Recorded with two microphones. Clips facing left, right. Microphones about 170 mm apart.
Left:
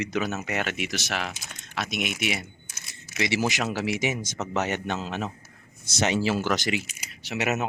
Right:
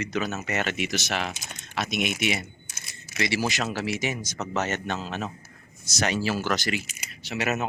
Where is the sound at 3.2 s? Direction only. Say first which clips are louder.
Left 1 dB; 20° left (ahead or behind).